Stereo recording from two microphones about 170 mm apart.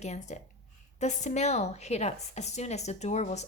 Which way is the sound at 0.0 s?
40° left (ahead or behind).